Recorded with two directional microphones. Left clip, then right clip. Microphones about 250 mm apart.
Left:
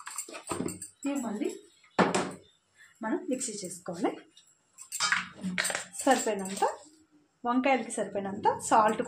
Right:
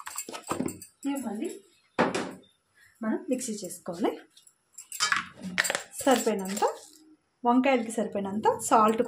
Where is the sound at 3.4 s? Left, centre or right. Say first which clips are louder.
Right 2 dB; centre.